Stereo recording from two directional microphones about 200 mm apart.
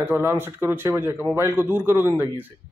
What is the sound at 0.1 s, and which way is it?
A man's voice, 10° right (ahead or behind).